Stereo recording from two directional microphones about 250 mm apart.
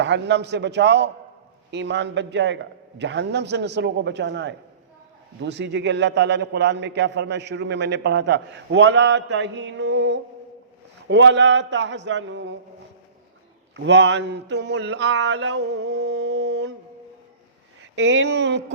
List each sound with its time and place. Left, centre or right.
0.0 s a man's voice: right
13.7 s a man's voice: right
17.9 s a man's voice: right